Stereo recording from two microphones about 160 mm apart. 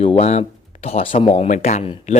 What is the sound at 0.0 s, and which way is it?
A man's voice, 40° left (ahead or behind).